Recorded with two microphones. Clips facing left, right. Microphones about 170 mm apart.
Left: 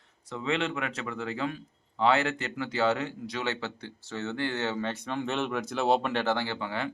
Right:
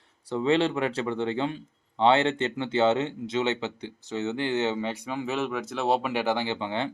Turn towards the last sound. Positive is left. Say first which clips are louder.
# right 4 dB
turn(degrees=-25)  # may be behind; listen again after turning